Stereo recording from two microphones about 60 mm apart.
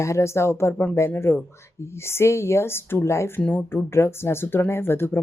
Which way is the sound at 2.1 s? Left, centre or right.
Left.